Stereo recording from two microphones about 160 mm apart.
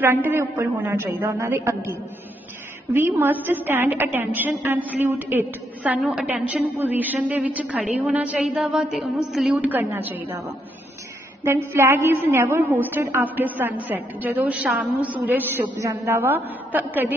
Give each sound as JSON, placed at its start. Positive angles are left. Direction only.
{"t": 0.0, "sound": "a woman's voice", "side_deg": -15}
{"t": 2.9, "sound": "a woman's voice", "side_deg": -15}
{"t": 11.4, "sound": "a woman's voice", "side_deg": -15}